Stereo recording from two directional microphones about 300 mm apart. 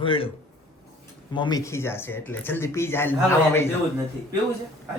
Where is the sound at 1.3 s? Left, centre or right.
Centre.